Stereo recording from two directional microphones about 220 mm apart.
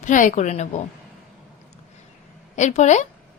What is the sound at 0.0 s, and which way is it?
Speech, 35° left (ahead or behind).